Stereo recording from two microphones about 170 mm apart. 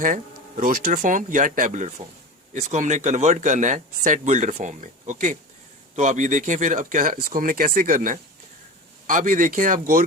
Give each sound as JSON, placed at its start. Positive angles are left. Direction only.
{"t": 0.0, "sound": "a man's voice", "side_deg": -50}